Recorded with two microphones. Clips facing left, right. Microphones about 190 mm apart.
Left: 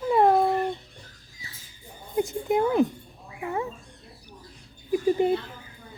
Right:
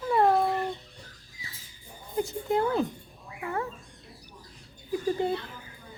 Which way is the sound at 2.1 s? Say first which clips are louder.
Left 3 dB; 15° left (ahead or behind).